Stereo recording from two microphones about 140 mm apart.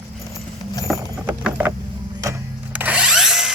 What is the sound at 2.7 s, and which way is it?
Drill, 10° right (ahead or behind).